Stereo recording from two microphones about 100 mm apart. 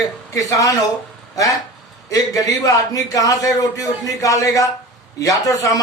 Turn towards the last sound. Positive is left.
turn(degrees=35)  # may be behind; listen again after turning